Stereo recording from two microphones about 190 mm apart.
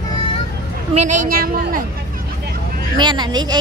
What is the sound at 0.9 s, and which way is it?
Speech, 40° right (ahead or behind).